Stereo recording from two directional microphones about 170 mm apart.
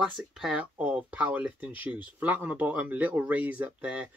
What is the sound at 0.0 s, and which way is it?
Speech, 5° right (ahead or behind).